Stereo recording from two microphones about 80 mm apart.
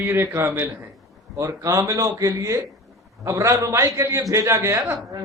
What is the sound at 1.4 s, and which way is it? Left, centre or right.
A man's voice, right.